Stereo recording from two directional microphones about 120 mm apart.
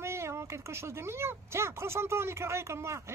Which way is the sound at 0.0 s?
20° right (ahead or behind).